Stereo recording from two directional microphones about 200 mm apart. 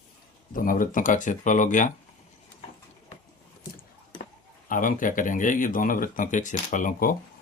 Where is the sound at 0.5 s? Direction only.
45° left (ahead or behind).